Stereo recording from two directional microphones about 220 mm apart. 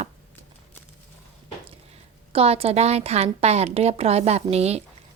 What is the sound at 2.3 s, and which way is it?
Speech, 25° right (ahead or behind).